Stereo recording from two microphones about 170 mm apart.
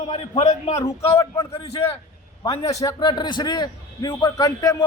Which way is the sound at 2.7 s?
20° left (ahead or behind).